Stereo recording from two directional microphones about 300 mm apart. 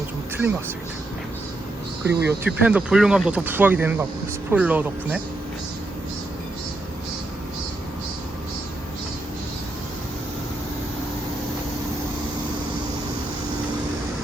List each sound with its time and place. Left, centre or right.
2.0 s speech: centre